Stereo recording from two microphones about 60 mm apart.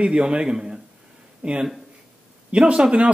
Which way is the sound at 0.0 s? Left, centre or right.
Centre.